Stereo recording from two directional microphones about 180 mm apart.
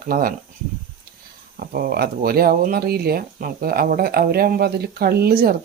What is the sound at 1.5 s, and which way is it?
Speech, 55° right (ahead or behind).